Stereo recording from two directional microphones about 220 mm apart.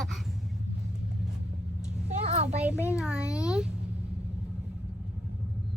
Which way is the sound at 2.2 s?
30° right (ahead or behind).